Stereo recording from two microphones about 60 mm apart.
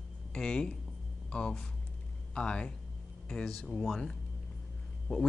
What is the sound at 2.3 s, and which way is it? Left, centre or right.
Speech, centre.